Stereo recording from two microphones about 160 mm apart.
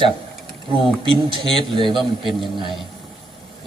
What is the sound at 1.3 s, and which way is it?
Speech, 30° right (ahead or behind).